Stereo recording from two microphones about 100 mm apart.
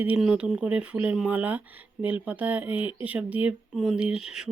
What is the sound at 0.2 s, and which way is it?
Speech, 5° right (ahead or behind).